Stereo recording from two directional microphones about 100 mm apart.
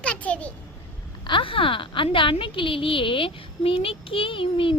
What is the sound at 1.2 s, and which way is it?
A woman's voice, 60° left (ahead or behind).